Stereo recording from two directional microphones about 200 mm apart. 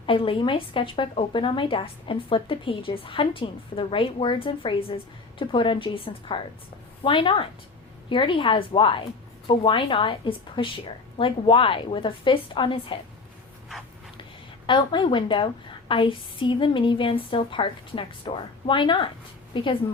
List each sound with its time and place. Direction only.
0.0 s speech: 25° left (ahead or behind)
14.7 s speech: 25° left (ahead or behind)